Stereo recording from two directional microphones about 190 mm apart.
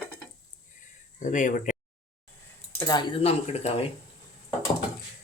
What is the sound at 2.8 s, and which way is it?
Speech, 20° left (ahead or behind).